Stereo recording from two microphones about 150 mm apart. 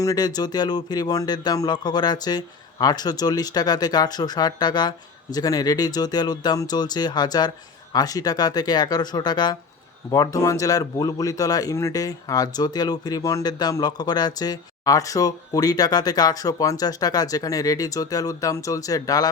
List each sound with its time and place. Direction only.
0.0 s a man's voice: 25° left (ahead or behind)